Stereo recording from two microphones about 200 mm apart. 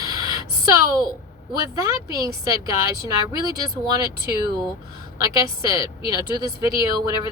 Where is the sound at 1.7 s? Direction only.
20° right (ahead or behind).